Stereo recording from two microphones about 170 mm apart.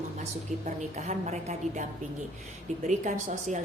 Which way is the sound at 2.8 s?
45° right (ahead or behind).